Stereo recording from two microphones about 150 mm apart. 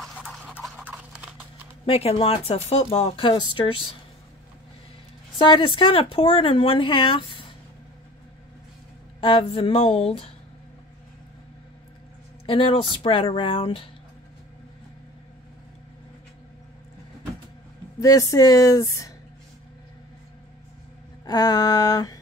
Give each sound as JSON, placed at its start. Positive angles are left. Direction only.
{"t": 0.0, "sound": "toothbrush", "side_deg": 0}
{"t": 0.7, "sound": "horse", "side_deg": -10}
{"t": 1.9, "sound": "speech", "side_deg": 40}
{"t": 5.4, "sound": "speech", "side_deg": 35}
{"t": 9.2, "sound": "speech", "side_deg": 35}
{"t": 12.4, "sound": "speech", "side_deg": 35}
{"t": 18.0, "sound": "speech", "side_deg": 20}
{"t": 21.3, "sound": "speech", "side_deg": 25}